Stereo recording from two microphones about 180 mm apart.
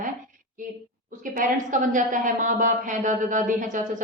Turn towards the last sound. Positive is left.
turn(degrees=-45)  # may be behind; listen again after turning